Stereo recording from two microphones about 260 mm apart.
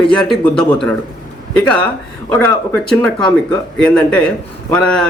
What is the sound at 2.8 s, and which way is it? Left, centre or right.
A man's voice, centre.